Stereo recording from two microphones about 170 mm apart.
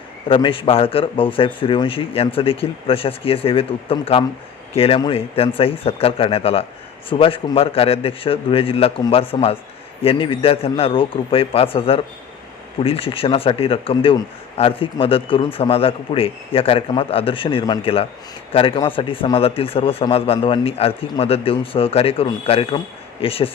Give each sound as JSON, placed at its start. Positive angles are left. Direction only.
{"t": 0.3, "sound": "speech", "side_deg": 30}